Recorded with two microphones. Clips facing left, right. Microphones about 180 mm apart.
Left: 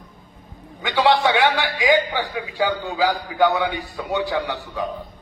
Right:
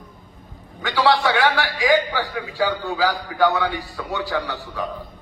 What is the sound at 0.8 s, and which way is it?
A man's voice, 20° left (ahead or behind).